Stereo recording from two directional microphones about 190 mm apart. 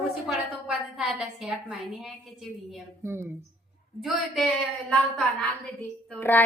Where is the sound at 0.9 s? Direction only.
5° right (ahead or behind).